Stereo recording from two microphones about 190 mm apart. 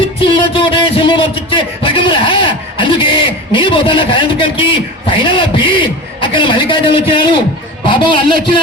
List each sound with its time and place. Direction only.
0.3 s a man's voice: 25° left (ahead or behind)